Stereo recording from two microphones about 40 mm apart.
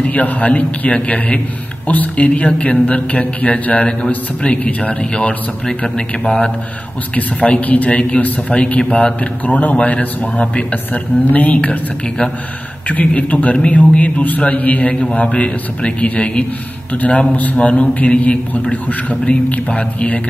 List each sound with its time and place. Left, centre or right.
0.0 s speech: left
7.3 s a man's voice: left
7.6 s speech: left
9.6 s a man's voice: left
9.9 s speech: left
14.1 s a man's voice: left
17.6 s speech: left